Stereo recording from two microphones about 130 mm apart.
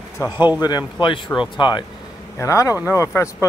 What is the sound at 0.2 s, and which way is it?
Speech, 25° left (ahead or behind).